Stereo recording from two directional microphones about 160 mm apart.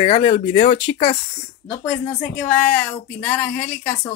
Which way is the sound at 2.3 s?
5° left (ahead or behind).